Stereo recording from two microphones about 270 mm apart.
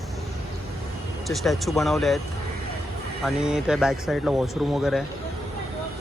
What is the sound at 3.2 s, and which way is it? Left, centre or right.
Speech, centre.